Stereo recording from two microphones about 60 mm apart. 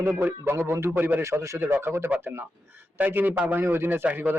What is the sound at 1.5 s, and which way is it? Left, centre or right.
A man's voice, right.